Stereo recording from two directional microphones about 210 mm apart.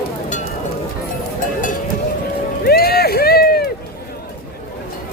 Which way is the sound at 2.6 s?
45° left (ahead or behind).